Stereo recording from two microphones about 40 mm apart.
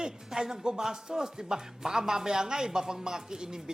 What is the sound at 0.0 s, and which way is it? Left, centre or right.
Speech, centre.